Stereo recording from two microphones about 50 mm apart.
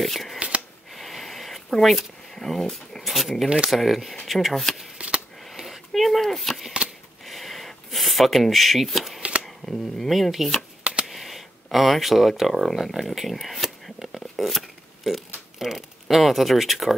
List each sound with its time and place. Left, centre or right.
0.0 s speech: centre
3.4 s speech: centre
3.7 s speech: centre
4.9 s a sound: right
5.4 s a sound: centre
9.4 s speech: centre
10.8 s typing: centre
11.1 s a sound: centre
14.2 s zipper: centre